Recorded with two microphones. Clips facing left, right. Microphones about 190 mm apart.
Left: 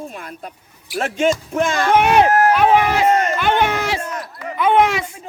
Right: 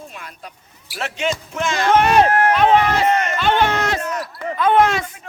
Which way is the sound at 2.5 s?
10° left (ahead or behind).